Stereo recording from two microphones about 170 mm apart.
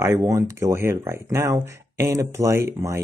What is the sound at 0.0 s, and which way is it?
Speech, 15° right (ahead or behind).